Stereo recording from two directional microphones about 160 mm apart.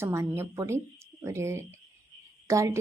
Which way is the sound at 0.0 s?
15° right (ahead or behind).